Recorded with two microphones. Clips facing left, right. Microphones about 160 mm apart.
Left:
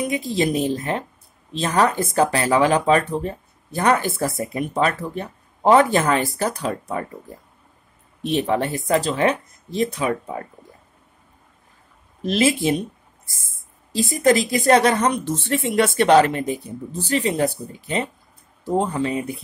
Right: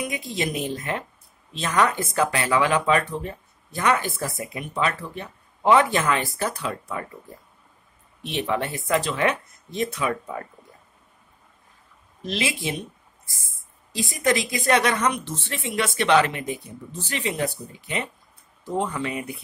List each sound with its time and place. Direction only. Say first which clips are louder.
0.0 s speech: left 6 dB; 30° left (ahead or behind)
8.2 s speech: left 5 dB; 40° left (ahead or behind)
12.3 s speech: left 9 dB; 40° left (ahead or behind)
13.9 s speech: left 6 dB; 35° left (ahead or behind)
15.2 s speech: left 9 dB; 45° left (ahead or behind)